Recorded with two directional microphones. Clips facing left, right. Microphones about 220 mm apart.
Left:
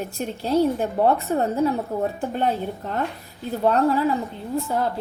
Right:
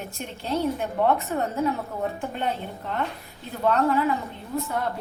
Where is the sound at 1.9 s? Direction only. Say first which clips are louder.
Left 5 dB; 40° left (ahead or behind).